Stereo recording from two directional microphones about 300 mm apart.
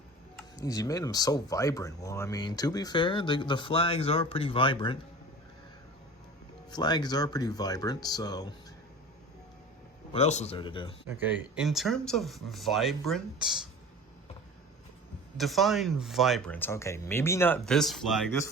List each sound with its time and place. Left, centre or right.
0.3 s speech: centre
6.7 s speech: centre
10.1 s speech: left
11.2 s speech: centre
15.4 s speech: centre